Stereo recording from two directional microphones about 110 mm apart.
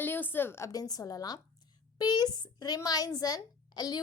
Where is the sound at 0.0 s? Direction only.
20° left (ahead or behind).